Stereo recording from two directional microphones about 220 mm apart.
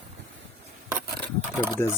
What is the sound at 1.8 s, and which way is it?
Speech, 10° left (ahead or behind).